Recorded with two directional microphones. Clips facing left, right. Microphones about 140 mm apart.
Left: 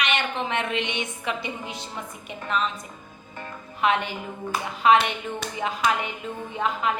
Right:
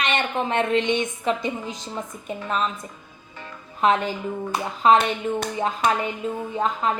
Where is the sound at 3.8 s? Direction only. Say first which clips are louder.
Right 3 dB; 40° right (ahead or behind).